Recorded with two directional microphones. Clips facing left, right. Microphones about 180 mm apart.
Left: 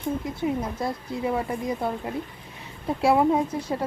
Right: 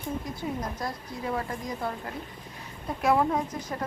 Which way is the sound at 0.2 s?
25° left (ahead or behind).